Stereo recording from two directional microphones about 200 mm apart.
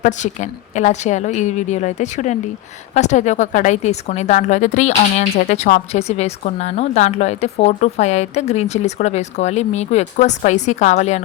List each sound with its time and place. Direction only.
0.0 s a woman's voice: 35° left (ahead or behind)